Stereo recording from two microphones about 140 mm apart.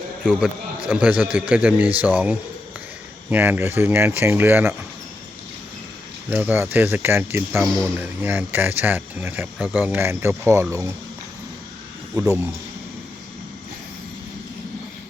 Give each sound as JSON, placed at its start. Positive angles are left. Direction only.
{"t": 0.3, "sound": "speech", "side_deg": -5}
{"t": 6.3, "sound": "speech", "side_deg": -15}
{"t": 12.1, "sound": "speech", "side_deg": -25}